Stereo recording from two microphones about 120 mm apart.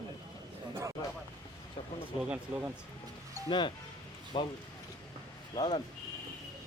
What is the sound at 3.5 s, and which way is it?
Speech, 40° left (ahead or behind).